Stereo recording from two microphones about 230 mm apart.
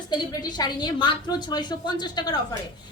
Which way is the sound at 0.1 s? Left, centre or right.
Centre.